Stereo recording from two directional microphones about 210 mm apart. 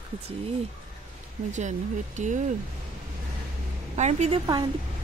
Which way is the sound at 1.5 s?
35° right (ahead or behind).